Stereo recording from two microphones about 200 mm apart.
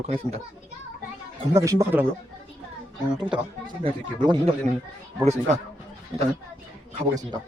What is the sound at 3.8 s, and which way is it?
A child's voice, 30° right (ahead or behind).